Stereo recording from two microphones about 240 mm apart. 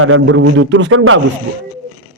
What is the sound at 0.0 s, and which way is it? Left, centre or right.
A man's voice, right.